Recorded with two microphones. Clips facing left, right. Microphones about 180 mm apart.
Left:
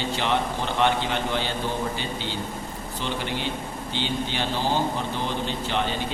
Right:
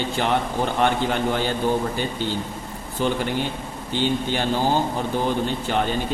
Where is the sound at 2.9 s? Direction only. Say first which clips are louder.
Right 7 dB; 50° right (ahead or behind).